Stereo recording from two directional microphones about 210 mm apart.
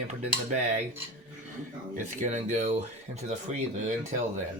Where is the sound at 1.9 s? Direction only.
35° right (ahead or behind).